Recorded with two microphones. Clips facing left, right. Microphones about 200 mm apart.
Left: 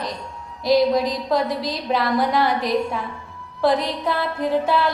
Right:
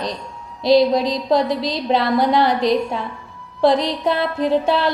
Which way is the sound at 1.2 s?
25° right (ahead or behind).